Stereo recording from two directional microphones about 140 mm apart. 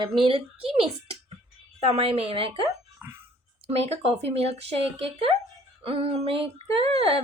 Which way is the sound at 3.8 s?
45° right (ahead or behind).